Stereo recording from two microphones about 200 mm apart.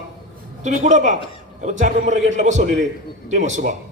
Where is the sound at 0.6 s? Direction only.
35° right (ahead or behind).